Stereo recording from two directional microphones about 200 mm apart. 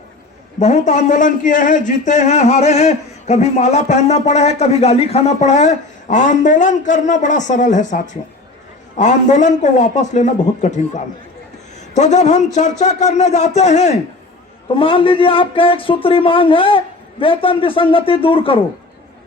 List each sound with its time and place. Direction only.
0.6 s speech: 35° left (ahead or behind)